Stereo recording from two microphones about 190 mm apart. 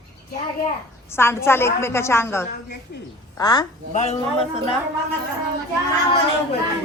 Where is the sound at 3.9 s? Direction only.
35° left (ahead or behind).